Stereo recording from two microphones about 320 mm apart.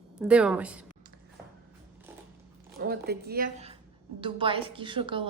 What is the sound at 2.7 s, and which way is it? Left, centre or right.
Speech, right.